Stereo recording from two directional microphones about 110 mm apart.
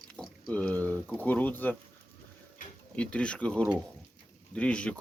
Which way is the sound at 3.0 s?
10° left (ahead or behind).